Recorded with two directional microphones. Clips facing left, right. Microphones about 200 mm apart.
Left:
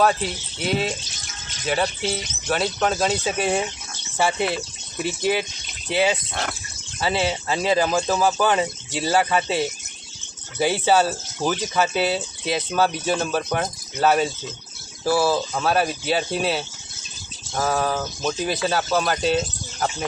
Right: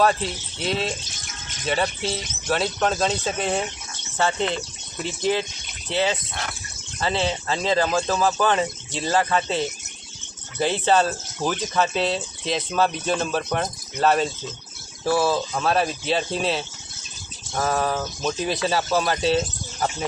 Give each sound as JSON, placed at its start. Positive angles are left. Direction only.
{"t": 0.0, "sound": "speech", "side_deg": 5}
{"t": 6.3, "sound": "speech", "side_deg": 55}
{"t": 7.0, "sound": "speech", "side_deg": 10}